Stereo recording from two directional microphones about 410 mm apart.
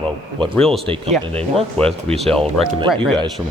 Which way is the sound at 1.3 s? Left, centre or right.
Centre.